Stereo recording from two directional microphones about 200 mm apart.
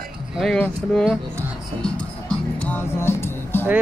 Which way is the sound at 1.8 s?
5° left (ahead or behind).